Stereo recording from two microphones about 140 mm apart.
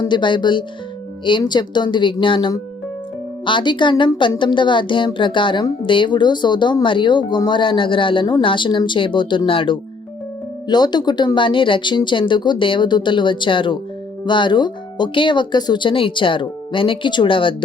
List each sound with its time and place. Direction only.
0.0 s speech: 35° left (ahead or behind)